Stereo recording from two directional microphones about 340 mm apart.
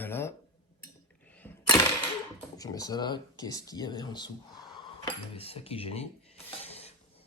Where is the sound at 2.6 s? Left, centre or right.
Centre.